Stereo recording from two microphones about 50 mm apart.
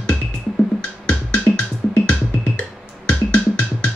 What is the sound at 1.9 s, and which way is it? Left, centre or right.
Music, left.